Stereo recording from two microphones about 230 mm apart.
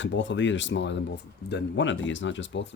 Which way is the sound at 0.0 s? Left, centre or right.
Left.